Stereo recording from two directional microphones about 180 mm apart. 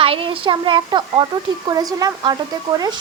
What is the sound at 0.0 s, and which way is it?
A child's voice, 30° right (ahead or behind).